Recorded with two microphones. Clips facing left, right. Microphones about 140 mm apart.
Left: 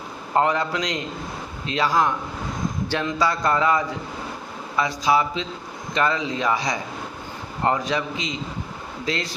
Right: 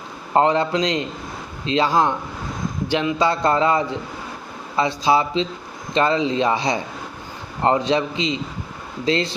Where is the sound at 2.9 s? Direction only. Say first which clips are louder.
Right 5 dB; 15° right (ahead or behind).